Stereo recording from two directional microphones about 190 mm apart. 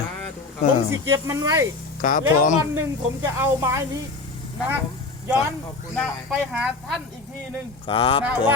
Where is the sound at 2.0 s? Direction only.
45° left (ahead or behind).